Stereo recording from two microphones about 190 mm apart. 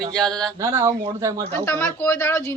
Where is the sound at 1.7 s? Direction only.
10° left (ahead or behind).